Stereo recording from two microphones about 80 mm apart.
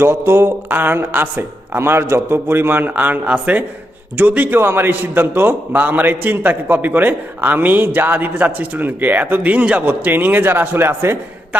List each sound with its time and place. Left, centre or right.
0.0 s a man's voice: right